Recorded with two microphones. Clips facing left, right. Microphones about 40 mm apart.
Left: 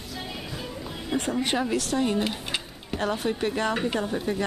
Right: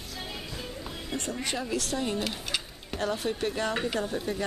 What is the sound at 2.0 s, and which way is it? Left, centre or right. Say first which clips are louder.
Speech: left 5 dB; centre.